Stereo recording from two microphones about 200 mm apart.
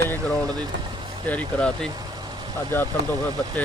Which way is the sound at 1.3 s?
5° left (ahead or behind).